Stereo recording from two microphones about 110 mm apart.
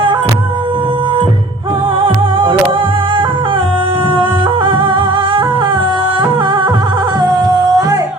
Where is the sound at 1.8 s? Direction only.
50° right (ahead or behind).